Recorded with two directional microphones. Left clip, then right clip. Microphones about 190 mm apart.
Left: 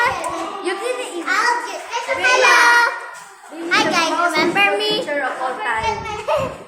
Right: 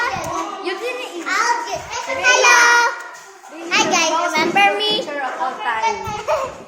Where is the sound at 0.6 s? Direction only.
5° left (ahead or behind).